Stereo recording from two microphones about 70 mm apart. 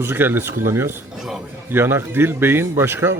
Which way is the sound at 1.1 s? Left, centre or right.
Centre.